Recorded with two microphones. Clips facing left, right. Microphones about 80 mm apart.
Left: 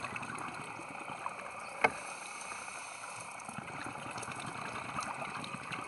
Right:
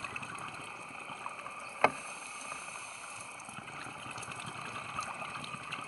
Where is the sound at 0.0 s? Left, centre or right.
Left.